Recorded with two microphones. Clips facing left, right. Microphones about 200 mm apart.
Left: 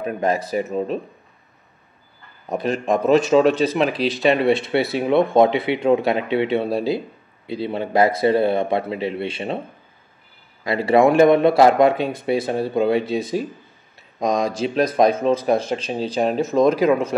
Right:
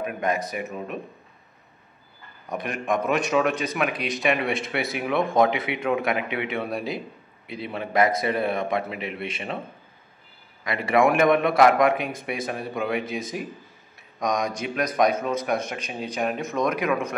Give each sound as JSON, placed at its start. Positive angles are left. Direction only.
{"t": 0.0, "sound": "speech", "side_deg": 30}
{"t": 2.5, "sound": "speech", "side_deg": 30}
{"t": 10.6, "sound": "speech", "side_deg": 30}